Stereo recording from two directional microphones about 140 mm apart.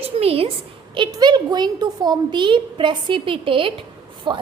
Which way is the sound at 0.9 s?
35° right (ahead or behind).